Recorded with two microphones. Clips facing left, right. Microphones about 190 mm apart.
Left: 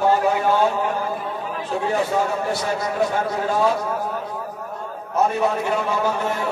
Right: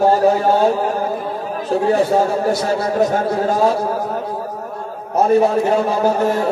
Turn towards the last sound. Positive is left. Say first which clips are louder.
# right 7 dB
turn(degrees=-40)  # may be behind; listen again after turning